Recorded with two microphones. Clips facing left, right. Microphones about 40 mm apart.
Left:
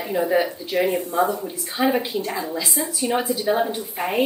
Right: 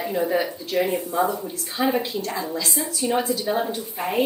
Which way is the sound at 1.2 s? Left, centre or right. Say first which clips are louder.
Left 1 dB; centre.